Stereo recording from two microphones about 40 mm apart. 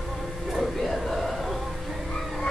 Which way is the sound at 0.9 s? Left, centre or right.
Centre.